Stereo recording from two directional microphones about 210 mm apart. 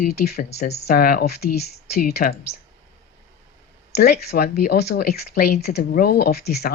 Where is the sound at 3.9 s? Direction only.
50° left (ahead or behind).